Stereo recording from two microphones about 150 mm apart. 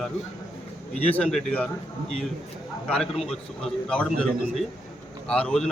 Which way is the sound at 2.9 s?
5° left (ahead or behind).